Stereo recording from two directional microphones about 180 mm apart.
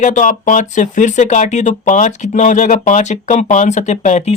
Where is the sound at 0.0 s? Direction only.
45° left (ahead or behind).